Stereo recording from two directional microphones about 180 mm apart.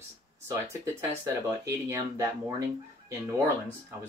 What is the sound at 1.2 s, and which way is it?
Speech, 15° right (ahead or behind).